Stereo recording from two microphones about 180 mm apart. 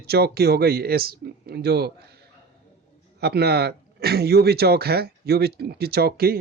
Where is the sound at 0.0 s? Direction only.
60° right (ahead or behind).